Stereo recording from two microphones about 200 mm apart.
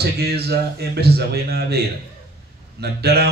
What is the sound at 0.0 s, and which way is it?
A man's voice, 50° right (ahead or behind).